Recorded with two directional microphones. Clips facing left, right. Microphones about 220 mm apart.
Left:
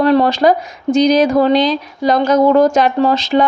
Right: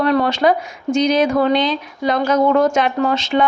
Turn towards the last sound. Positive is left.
turn(degrees=35)  # may be behind; listen again after turning